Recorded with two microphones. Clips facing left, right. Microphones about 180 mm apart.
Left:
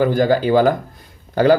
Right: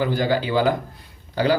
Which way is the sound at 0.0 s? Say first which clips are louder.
Left 6 dB; 50° left (ahead or behind).